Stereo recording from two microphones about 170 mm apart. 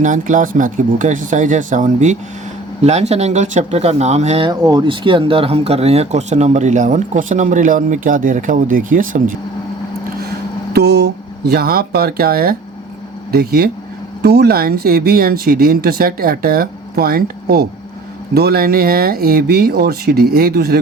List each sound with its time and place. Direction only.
0.0 s speech: 50° right (ahead or behind)
4.6 s speech: 25° right (ahead or behind); by 9.3 s 50° right (ahead or behind)
10.2 s speech: 70° right (ahead or behind)